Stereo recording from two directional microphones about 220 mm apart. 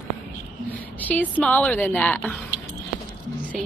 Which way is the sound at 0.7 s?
5° left (ahead or behind).